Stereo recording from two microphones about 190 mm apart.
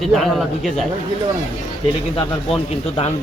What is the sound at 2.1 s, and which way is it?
Speech, 30° left (ahead or behind).